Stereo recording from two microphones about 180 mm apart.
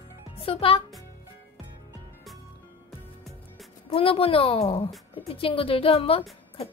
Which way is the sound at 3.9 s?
30° left (ahead or behind).